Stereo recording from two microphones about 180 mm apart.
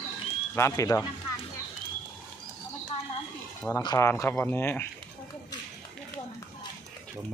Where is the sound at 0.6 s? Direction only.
15° left (ahead or behind).